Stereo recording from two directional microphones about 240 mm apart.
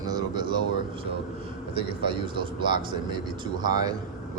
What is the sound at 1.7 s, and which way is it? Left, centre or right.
A man's voice, right.